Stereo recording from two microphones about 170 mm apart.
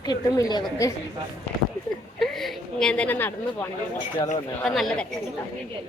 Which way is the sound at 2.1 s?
Centre (ahead or behind).